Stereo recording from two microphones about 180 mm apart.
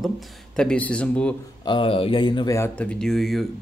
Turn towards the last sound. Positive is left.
turn(degrees=0)  # may be behind; listen again after turning